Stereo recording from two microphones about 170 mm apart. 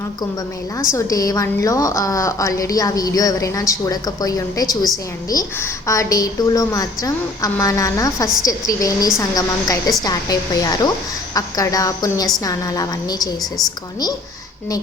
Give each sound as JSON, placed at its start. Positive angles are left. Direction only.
{"t": 0.9, "sound": "a woman's voice", "side_deg": 20}